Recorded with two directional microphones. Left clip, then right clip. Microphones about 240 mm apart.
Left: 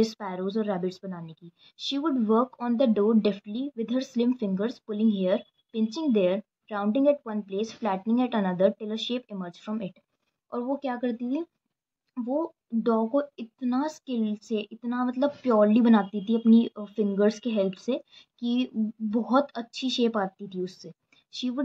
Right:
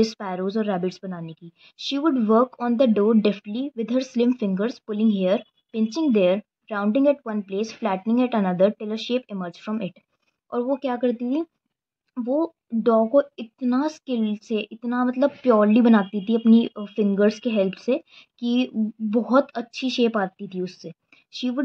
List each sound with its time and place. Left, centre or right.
0.0 s a woman's voice: right